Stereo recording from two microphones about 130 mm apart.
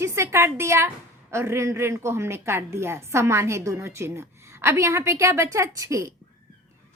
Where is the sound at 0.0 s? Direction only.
20° right (ahead or behind).